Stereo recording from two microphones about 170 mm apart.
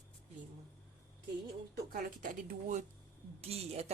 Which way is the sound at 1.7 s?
55° right (ahead or behind).